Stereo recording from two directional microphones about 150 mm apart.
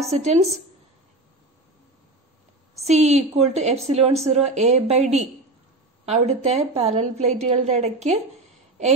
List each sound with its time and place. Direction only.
0.1 s a woman's voice: 45° right (ahead or behind)
2.8 s a woman's voice: 50° right (ahead or behind)